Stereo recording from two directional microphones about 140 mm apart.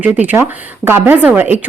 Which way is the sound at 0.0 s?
10° right (ahead or behind).